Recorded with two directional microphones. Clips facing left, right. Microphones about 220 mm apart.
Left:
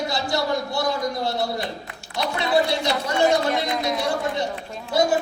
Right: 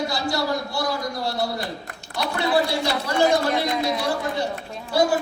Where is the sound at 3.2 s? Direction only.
5° right (ahead or behind).